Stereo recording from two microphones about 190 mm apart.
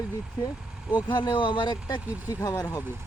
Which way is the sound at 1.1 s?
25° left (ahead or behind).